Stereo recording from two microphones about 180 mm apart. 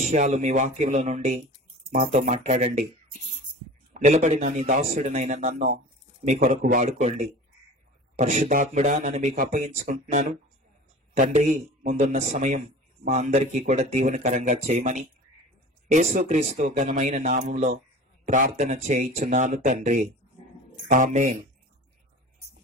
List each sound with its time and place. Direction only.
0.0 s a man's voice: 40° right (ahead or behind)
3.9 s a man's voice: 45° right (ahead or behind)
8.2 s a man's voice: 40° right (ahead or behind)